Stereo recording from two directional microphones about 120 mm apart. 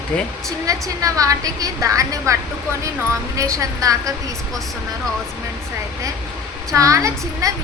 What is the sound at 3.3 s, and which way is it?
Speech, 30° right (ahead or behind).